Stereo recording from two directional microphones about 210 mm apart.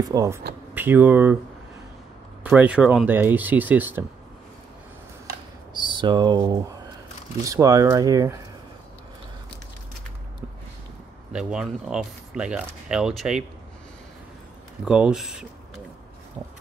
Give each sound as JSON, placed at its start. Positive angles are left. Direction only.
{"t": 0.0, "sound": "speech", "side_deg": -15}
{"t": 2.4, "sound": "speech", "side_deg": -5}
{"t": 5.8, "sound": "speech", "side_deg": -20}
{"t": 11.3, "sound": "speech", "side_deg": -5}
{"t": 14.9, "sound": "speech", "side_deg": -5}